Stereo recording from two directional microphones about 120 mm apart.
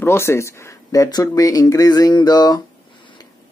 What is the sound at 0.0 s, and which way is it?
Speech, 20° left (ahead or behind).